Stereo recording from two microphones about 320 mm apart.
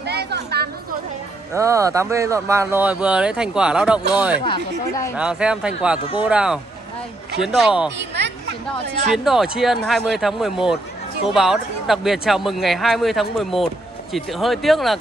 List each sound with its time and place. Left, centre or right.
0.0 s a sound: right
1.5 s speech: centre
4.5 s speech: centre
5.1 s speech: centre
9.1 s speech: centre